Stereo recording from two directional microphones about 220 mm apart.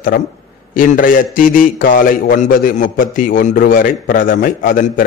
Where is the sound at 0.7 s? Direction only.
40° left (ahead or behind).